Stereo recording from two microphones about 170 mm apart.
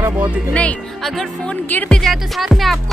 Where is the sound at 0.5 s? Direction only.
5° left (ahead or behind).